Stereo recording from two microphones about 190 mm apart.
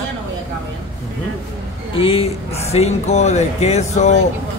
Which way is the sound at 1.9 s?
30° left (ahead or behind).